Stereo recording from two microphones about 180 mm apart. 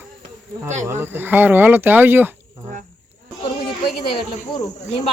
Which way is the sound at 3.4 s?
25° left (ahead or behind).